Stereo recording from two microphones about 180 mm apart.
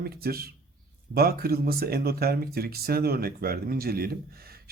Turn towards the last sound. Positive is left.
turn(degrees=-55)  # may be behind; listen again after turning